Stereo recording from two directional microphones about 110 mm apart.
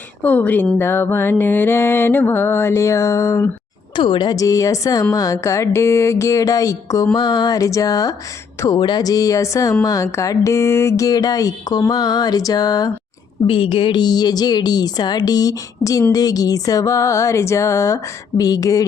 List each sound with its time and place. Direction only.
0.2 s speech: 15° left (ahead or behind)
0.8 s music: 20° left (ahead or behind)
3.9 s mantra: 45° left (ahead or behind)
13.5 s mantra: 55° left (ahead or behind); by 16.0 s 30° left (ahead or behind)
16.1 s music: 35° left (ahead or behind)